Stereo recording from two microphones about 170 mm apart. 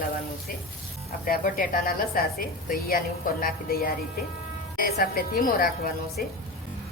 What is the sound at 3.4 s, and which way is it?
A woman's voice, 60° left (ahead or behind).